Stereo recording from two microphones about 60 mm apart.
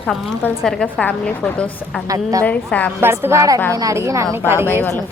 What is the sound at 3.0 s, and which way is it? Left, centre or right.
A woman's voice, right.